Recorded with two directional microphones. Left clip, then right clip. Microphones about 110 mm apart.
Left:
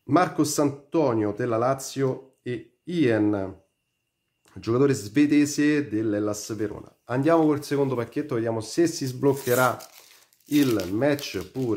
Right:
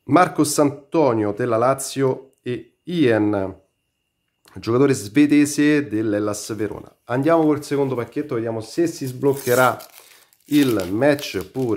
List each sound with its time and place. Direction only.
0.0 s a man's voice: 35° right (ahead or behind)
7.1 s speech: 15° right (ahead or behind); by 9.3 s 10° left (ahead or behind)
9.3 s speech: 20° right (ahead or behind)
11.0 s a man's voice: 30° right (ahead or behind)